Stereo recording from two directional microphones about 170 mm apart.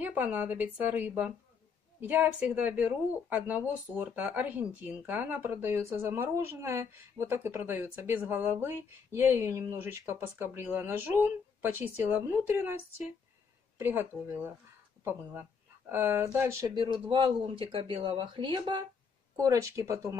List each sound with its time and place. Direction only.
0.0 s speech: 10° right (ahead or behind)
15.9 s speech: 15° right (ahead or behind)